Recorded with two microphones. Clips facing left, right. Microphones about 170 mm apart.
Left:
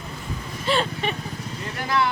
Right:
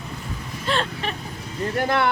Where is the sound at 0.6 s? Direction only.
5° left (ahead or behind).